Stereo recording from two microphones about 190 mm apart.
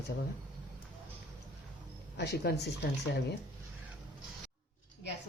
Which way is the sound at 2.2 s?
60° left (ahead or behind).